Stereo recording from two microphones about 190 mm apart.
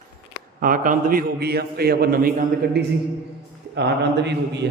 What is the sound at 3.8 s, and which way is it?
Mantra, 60° right (ahead or behind).